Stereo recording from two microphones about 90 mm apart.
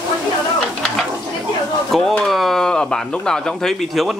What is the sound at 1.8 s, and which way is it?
Speech, 5° left (ahead or behind).